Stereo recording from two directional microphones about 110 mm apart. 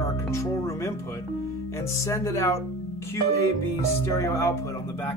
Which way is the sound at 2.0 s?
30° left (ahead or behind).